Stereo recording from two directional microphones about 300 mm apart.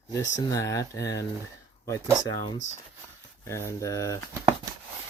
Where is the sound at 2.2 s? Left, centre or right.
Centre.